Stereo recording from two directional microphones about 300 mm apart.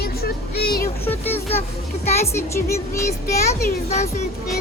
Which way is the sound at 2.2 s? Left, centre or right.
Centre.